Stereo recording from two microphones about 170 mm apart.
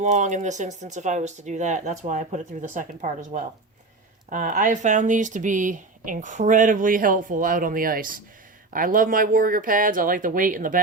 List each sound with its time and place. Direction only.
0.0 s speech: 45° right (ahead or behind)